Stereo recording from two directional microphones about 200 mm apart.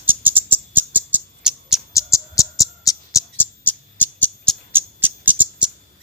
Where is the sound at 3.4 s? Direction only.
10° left (ahead or behind).